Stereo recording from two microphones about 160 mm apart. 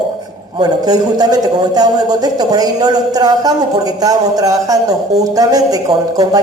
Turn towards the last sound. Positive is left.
turn(degrees=-25)  # may be behind; listen again after turning